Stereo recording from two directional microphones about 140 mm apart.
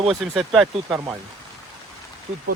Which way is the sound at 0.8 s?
20° right (ahead or behind).